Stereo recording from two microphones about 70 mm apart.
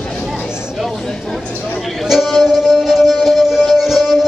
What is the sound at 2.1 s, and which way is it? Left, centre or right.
Music, centre.